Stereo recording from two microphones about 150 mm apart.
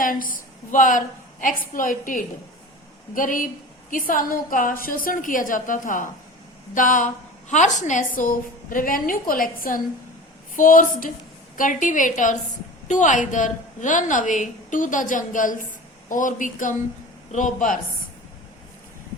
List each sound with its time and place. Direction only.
0.0 s a woman's voice: 65° left (ahead or behind)